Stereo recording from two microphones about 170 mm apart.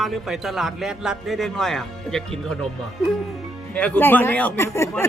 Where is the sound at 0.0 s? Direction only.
Centre (ahead or behind).